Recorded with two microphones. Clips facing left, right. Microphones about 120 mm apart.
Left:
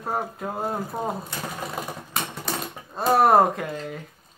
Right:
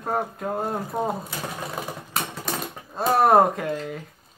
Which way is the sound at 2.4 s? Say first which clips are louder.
Even; centre (ahead or behind).